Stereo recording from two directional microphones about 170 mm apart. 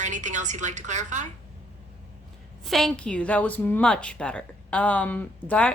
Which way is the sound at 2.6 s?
Centre (ahead or behind).